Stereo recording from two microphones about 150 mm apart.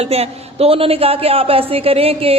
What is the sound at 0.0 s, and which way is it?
A woman's voice, 40° right (ahead or behind).